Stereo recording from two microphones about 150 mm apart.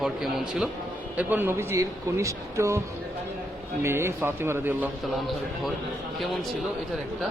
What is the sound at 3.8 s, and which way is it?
Speech, 15° right (ahead or behind).